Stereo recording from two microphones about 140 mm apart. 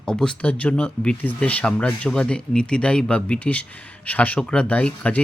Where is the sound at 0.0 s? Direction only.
5° left (ahead or behind).